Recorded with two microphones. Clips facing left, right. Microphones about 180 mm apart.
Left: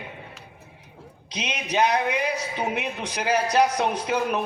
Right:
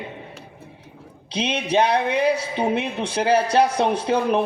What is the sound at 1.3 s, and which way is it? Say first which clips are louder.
A man's voice: right 6 dB; 30° right (ahead or behind).